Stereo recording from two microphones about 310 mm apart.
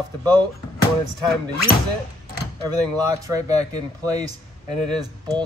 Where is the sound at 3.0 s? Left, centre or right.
Centre.